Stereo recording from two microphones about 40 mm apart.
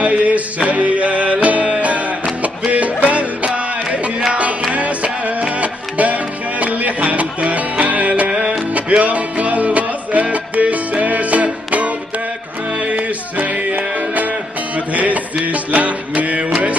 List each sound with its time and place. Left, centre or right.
0.0 s music: right